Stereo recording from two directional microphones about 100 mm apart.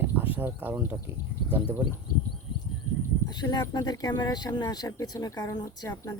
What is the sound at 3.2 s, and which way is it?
Speech, 45° left (ahead or behind).